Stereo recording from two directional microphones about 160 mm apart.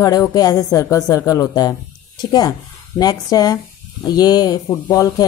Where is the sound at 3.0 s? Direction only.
25° left (ahead or behind).